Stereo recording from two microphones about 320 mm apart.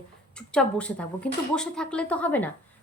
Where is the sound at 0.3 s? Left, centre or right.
Centre.